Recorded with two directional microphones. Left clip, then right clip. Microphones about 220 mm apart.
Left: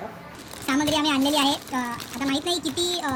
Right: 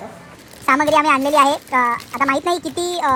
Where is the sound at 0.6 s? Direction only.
15° right (ahead or behind).